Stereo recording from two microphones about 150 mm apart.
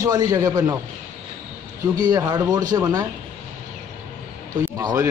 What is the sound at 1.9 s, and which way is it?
A man's voice, 25° right (ahead or behind).